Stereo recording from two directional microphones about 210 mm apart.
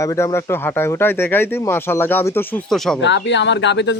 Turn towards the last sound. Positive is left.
turn(degrees=55)  # may be behind; listen again after turning